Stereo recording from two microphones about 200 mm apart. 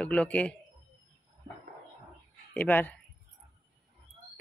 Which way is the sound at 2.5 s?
10° left (ahead or behind).